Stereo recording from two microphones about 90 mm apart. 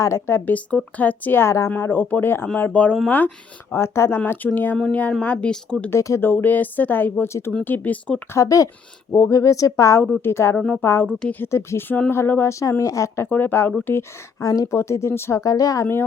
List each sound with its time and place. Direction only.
0.0 s speech: 30° left (ahead or behind)
2.6 s speech: 15° left (ahead or behind)
3.7 s speech: 30° left (ahead or behind)
4.4 s speech: 20° left (ahead or behind)
5.9 s speech: 35° left (ahead or behind)
6.2 s speech: 20° left (ahead or behind)
8.3 s speech: 35° left (ahead or behind)
10.2 s speech: 25° left (ahead or behind)
11.0 s speech: 15° left (ahead or behind)
11.5 s speech: 30° left (ahead or behind)
13.2 s speech: 20° left (ahead or behind)
14.4 s a woman's voice: 45° left (ahead or behind)
14.8 s speech: 30° left (ahead or behind)
15.4 s speech: 40° left (ahead or behind)